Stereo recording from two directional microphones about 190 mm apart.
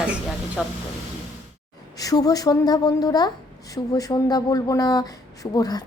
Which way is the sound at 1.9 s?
20° left (ahead or behind).